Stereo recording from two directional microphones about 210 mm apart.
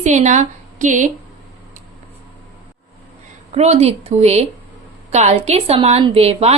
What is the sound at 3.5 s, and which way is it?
A woman's voice, 30° right (ahead or behind).